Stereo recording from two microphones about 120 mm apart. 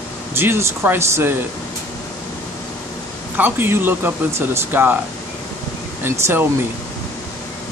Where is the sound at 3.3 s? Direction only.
15° right (ahead or behind).